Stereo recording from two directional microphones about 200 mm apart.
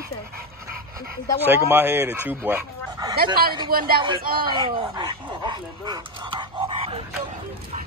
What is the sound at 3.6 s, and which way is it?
Speech, 50° right (ahead or behind).